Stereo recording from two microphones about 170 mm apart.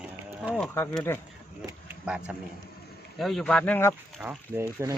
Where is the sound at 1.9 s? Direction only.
5° right (ahead or behind); by 3.9 s 10° left (ahead or behind).